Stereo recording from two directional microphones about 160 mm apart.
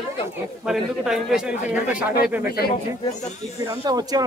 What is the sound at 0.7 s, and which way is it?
A man's voice, 5° right (ahead or behind).